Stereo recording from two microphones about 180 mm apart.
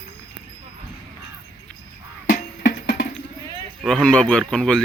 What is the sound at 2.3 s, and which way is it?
Music, 55° left (ahead or behind).